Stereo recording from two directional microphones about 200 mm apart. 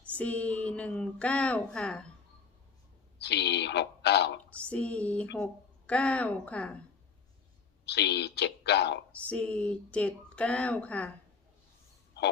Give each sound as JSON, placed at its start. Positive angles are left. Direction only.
{"t": 0.2, "sound": "a woman's voice", "side_deg": 5}
{"t": 3.2, "sound": "a sound", "side_deg": 55}
{"t": 4.7, "sound": "a woman's voice", "side_deg": 5}
{"t": 7.9, "sound": "speech", "side_deg": 55}
{"t": 9.1, "sound": "speech", "side_deg": 5}